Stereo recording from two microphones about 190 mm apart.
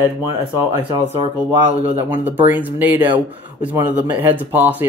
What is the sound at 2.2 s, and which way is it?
Speech, 10° right (ahead or behind).